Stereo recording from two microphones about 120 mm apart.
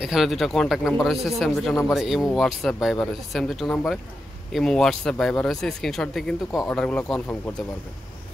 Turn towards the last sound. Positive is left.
turn(degrees=15)  # may be behind; listen again after turning